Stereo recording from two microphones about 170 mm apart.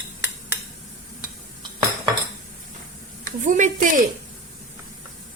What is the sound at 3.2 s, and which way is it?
Speech, 50° right (ahead or behind).